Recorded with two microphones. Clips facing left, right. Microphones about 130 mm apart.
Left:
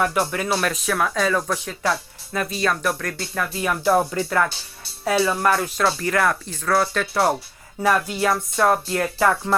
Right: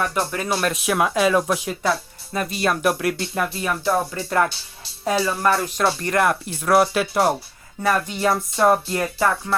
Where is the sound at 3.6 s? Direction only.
5° left (ahead or behind).